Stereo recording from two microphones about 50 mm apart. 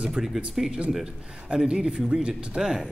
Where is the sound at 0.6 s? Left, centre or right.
Centre.